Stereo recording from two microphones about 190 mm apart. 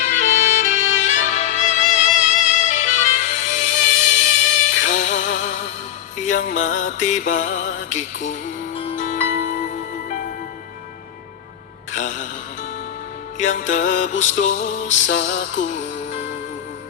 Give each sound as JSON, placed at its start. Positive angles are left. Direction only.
{"t": 0.0, "sound": "music", "side_deg": 40}
{"t": 6.4, "sound": "music", "side_deg": 40}
{"t": 11.9, "sound": "music", "side_deg": 40}
{"t": 13.5, "sound": "music", "side_deg": 40}